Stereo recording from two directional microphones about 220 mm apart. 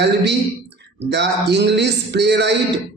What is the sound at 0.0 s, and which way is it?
A man's voice, 50° right (ahead or behind).